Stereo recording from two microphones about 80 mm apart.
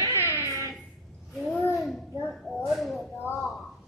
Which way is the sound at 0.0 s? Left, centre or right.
Left.